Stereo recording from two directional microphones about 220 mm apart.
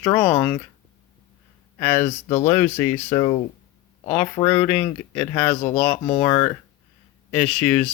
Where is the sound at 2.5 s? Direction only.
10° left (ahead or behind).